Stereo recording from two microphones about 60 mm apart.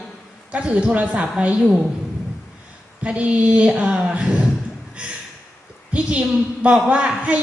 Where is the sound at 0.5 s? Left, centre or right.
Centre.